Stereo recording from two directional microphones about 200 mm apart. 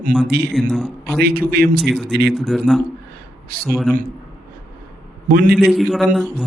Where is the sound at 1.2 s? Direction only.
50° right (ahead or behind).